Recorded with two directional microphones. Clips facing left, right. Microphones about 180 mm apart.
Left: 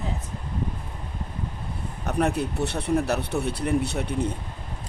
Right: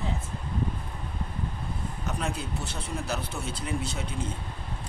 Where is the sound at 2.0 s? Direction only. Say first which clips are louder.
Left 10 dB; 60° left (ahead or behind).